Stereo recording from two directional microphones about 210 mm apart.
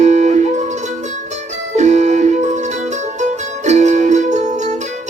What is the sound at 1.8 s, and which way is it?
Music, 35° right (ahead or behind).